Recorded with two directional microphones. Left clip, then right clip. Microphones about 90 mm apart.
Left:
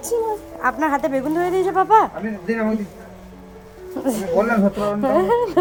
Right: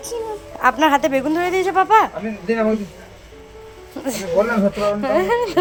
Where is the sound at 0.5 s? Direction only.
5° right (ahead or behind).